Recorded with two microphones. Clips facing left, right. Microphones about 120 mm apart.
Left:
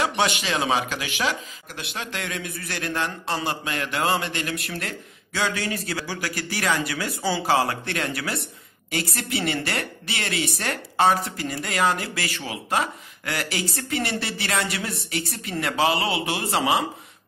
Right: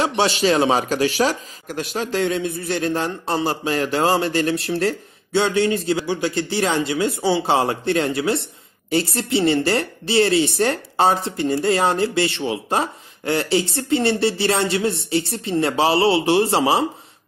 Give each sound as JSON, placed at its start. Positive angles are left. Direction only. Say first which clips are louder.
{"t": 0.0, "sound": "speech", "louder": "right 5 dB", "side_deg": -30}